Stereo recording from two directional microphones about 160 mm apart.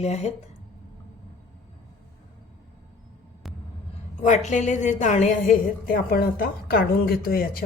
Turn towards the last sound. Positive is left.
turn(degrees=65)  # may be behind; listen again after turning